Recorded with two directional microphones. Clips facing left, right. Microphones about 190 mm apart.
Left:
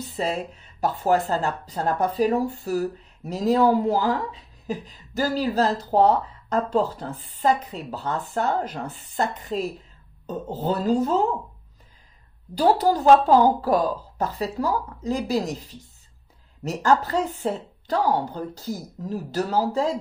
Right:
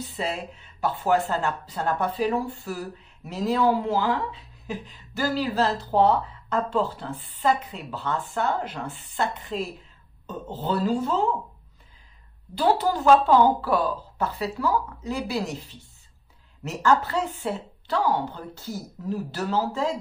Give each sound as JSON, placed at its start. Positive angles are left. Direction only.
{"t": 0.0, "sound": "speech", "side_deg": 40}
{"t": 12.5, "sound": "speech", "side_deg": 40}